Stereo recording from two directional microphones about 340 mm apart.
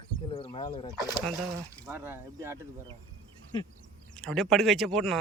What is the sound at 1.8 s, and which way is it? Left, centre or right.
Speech, centre.